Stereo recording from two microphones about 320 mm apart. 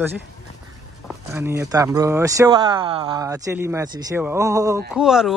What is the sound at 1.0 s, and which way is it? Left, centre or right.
Speech, centre.